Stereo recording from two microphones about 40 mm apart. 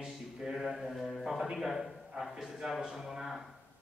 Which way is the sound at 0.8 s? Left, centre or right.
Centre.